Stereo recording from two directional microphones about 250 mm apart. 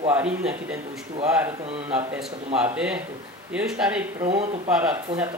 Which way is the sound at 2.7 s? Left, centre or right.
Centre.